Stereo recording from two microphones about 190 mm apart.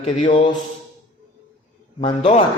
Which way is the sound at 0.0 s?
25° left (ahead or behind).